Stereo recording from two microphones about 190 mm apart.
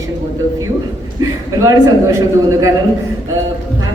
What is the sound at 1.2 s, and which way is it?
A man's voice, 20° right (ahead or behind).